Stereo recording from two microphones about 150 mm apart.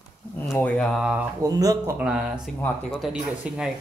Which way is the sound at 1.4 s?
25° right (ahead or behind).